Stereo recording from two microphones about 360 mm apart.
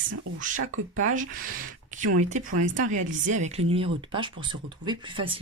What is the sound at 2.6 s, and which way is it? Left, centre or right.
Speech, right.